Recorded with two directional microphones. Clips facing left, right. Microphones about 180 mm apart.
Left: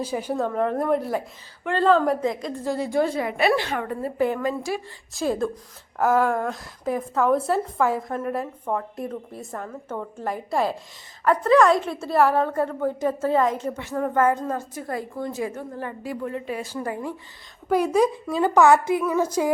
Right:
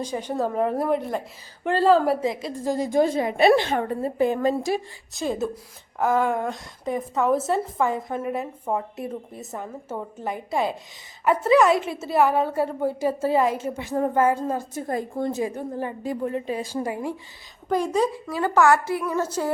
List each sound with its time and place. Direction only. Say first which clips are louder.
0.0 s a woman's voice: left 1 dB; 10° left (ahead or behind)
0.4 s a woman's voice: right 1 dB; 5° right (ahead or behind)
1.7 s a woman's voice: right 1 dB; 10° right (ahead or behind)
2.8 s a woman's voice: right 2 dB; 20° right (ahead or behind); by 4.6 s 35° right (ahead or behind)
5.1 s a woman's voice: left 2 dB; centre (ahead or behind)
14.7 s a woman's voice: right 3 dB; 25° right (ahead or behind)
17.7 s a woman's voice: left 3 dB; 10° left (ahead or behind)